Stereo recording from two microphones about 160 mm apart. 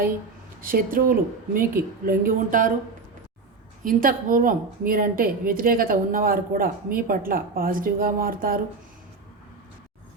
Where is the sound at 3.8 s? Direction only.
60° right (ahead or behind).